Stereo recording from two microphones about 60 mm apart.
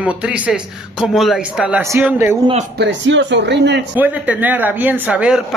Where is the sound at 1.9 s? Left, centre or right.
Right.